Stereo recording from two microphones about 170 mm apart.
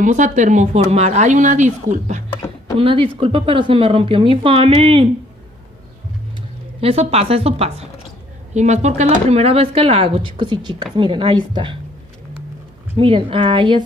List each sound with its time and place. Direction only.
0.0 s speech: 45° right (ahead or behind)
2.8 s speech: 30° right (ahead or behind)
6.8 s speech: 35° right (ahead or behind)
12.9 s speech: 30° right (ahead or behind)